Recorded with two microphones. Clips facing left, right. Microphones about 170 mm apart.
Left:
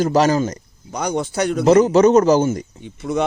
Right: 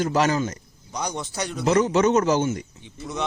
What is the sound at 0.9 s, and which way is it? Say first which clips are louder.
Speech: left 8 dB; 55° left (ahead or behind).